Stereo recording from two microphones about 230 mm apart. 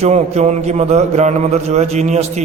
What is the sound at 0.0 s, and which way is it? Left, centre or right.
A man's voice, right.